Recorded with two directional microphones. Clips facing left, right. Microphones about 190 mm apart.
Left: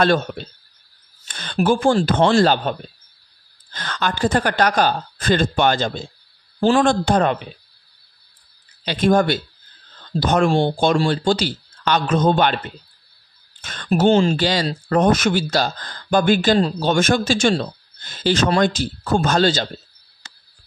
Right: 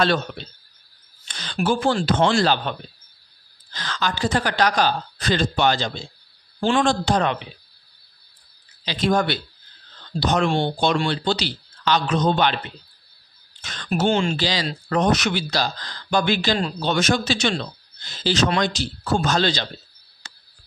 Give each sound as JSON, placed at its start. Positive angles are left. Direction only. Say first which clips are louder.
{"t": 0.0, "sound": "speech", "louder": "left 4 dB", "side_deg": 45}
{"t": 3.7, "sound": "speech", "louder": "left 2 dB", "side_deg": 55}
{"t": 8.8, "sound": "speech", "louder": "left 4 dB", "side_deg": 50}
{"t": 14.3, "sound": "speech", "louder": "left 5 dB", "side_deg": 50}